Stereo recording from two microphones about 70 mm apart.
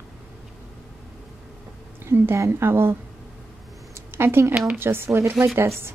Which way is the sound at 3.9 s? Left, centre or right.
Right.